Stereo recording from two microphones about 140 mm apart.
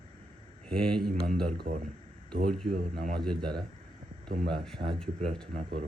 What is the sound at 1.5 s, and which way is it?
Speech, 60° right (ahead or behind).